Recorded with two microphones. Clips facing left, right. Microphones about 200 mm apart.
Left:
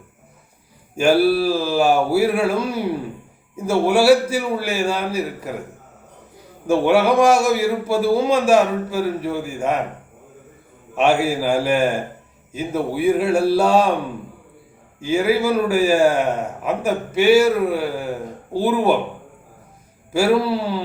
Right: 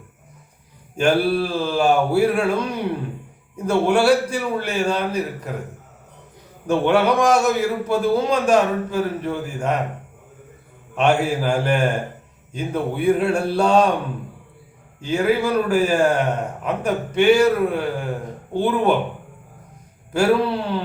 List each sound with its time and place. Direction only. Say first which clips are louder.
0.9 s a man's voice: left 3 dB; 5° left (ahead or behind)
6.7 s a man's voice: left 2 dB; 10° left (ahead or behind)
10.9 s a man's voice: left 1 dB; 5° left (ahead or behind)
15.0 s a man's voice: left 2 dB; 5° left (ahead or behind)
20.1 s a man's voice: left 1 dB; 5° left (ahead or behind)